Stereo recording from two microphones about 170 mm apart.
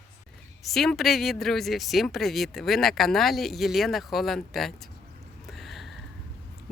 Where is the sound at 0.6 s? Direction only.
Centre (ahead or behind).